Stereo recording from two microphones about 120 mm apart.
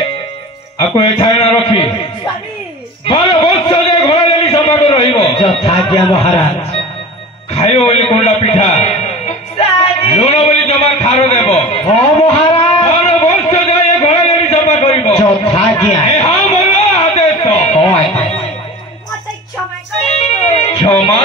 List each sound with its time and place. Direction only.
0.7 s a man's voice: 45° left (ahead or behind)
3.1 s a sound: 50° left (ahead or behind)
17.4 s music: 60° left (ahead or behind)
20.1 s music: 60° left (ahead or behind)